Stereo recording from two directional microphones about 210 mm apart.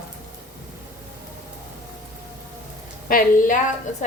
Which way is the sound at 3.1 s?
40° left (ahead or behind).